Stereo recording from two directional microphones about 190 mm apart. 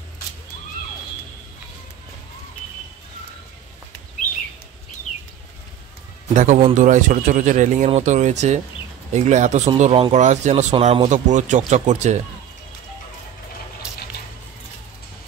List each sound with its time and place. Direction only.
6.3 s speech: 40° right (ahead or behind)